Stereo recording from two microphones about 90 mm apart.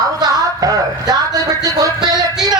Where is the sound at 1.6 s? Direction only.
45° right (ahead or behind).